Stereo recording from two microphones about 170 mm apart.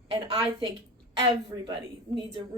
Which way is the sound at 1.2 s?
25° right (ahead or behind).